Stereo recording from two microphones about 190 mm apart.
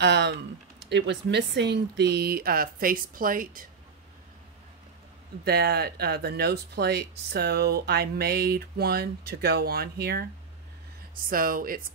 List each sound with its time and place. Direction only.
0.0 s speech: 65° right (ahead or behind); by 3.6 s 45° right (ahead or behind)
5.4 s speech: 55° right (ahead or behind)
11.2 s speech: 50° right (ahead or behind)